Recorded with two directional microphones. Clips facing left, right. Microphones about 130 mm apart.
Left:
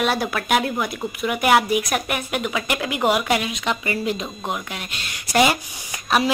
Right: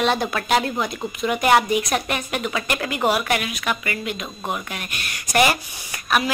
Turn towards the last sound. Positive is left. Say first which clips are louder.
# left 2 dB
turn(degrees=30)  # may be behind; listen again after turning